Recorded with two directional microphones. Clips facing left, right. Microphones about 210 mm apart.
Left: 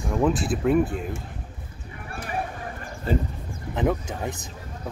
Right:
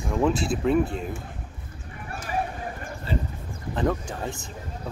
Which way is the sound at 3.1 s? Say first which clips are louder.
Left 5 dB; 50° left (ahead or behind).